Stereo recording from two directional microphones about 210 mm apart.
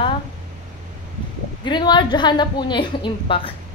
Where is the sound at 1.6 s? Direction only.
20° left (ahead or behind).